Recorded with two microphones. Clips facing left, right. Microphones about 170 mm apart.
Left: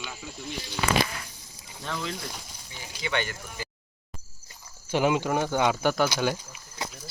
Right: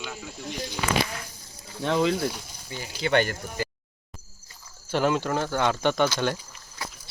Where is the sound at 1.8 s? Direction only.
65° right (ahead or behind).